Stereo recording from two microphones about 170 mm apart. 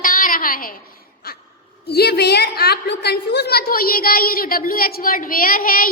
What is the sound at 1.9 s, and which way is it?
A woman's voice, 70° left (ahead or behind).